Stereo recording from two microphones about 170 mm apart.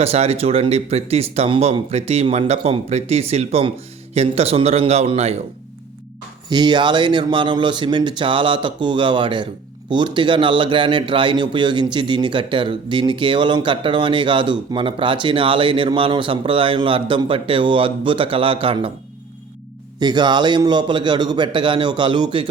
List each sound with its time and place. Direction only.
0.0 s speech: 35° right (ahead or behind)
6.5 s a man's voice: 25° right (ahead or behind)
20.0 s a man's voice: 25° right (ahead or behind)